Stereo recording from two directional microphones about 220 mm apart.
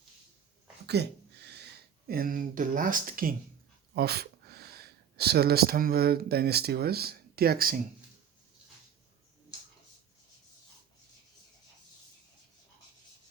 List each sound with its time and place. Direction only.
1.0 s speech: 50° right (ahead or behind)